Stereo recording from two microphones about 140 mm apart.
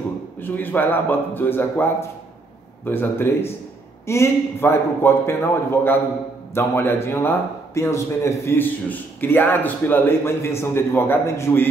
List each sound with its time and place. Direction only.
0.4 s speech: 15° left (ahead or behind)